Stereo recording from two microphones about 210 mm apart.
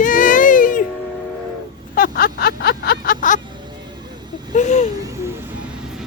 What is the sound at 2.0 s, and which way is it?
Vehicle, 45° left (ahead or behind).